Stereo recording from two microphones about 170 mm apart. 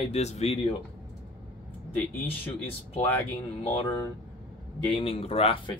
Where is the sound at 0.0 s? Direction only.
40° left (ahead or behind).